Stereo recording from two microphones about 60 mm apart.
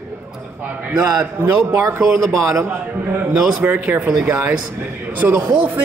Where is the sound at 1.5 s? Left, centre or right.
Right.